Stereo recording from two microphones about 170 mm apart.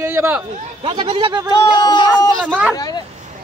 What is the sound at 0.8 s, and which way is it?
Speech, 35° right (ahead or behind).